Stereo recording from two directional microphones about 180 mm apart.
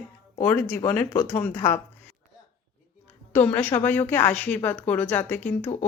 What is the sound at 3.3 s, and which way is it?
Speech, 10° left (ahead or behind).